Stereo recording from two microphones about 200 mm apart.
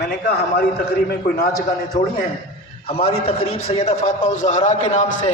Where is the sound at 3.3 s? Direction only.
30° left (ahead or behind).